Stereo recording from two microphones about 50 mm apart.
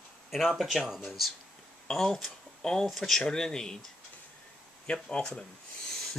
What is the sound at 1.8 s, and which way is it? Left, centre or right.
Speech, centre.